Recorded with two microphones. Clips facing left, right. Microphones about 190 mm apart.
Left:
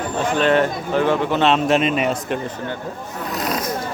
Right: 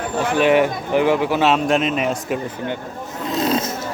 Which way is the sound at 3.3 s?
25° right (ahead or behind).